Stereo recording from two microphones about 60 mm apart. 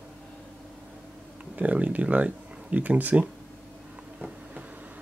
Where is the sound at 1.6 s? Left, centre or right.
Right.